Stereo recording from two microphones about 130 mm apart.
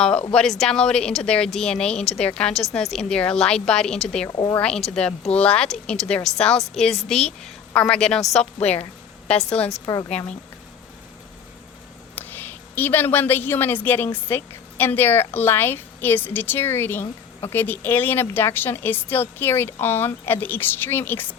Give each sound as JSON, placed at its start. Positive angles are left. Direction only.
{"t": 0.3, "sound": "a woman's voice", "side_deg": 5}
{"t": 4.3, "sound": "speech", "side_deg": 35}
{"t": 4.5, "sound": "a woman's voice", "side_deg": 10}
{"t": 9.8, "sound": "speech", "side_deg": 30}
{"t": 12.1, "sound": "a woman's voice", "side_deg": 15}